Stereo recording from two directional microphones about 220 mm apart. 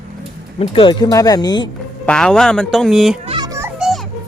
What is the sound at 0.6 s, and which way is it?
Speech, 20° left (ahead or behind).